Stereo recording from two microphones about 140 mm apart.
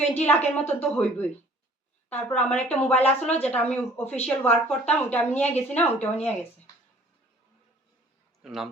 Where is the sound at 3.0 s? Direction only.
50° left (ahead or behind).